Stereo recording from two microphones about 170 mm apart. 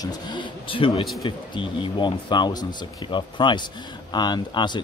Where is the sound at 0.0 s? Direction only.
25° left (ahead or behind).